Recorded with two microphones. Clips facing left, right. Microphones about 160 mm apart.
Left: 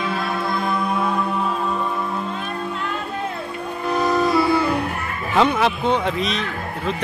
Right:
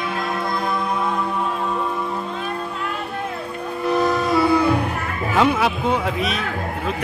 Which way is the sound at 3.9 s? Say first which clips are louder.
Left 1 dB; centre (ahead or behind).